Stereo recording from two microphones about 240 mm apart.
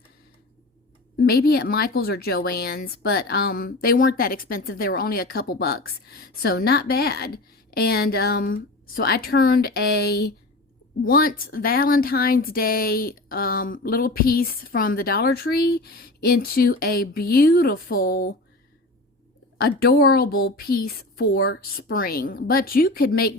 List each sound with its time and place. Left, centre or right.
1.2 s speech: left
19.5 s speech: left